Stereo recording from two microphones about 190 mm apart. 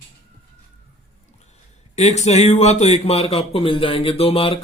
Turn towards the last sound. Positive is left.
turn(degrees=30)  # may be behind; listen again after turning